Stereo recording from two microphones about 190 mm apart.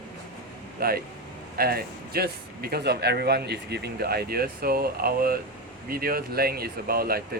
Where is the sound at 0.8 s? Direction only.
55° right (ahead or behind).